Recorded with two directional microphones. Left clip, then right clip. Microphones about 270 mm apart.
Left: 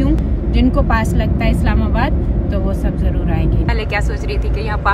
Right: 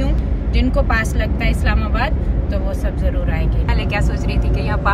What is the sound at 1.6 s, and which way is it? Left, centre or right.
Speech, centre.